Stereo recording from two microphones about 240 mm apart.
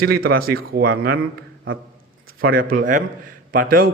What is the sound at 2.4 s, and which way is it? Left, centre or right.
A man's voice, right.